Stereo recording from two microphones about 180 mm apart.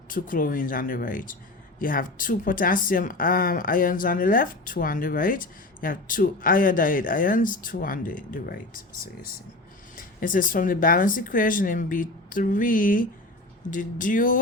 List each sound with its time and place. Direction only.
0.1 s a woman's voice: 50° left (ahead or behind)
10.2 s a woman's voice: 50° left (ahead or behind)